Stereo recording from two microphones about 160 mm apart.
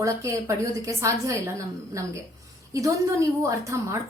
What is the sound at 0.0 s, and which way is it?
A woman's voice, 20° right (ahead or behind).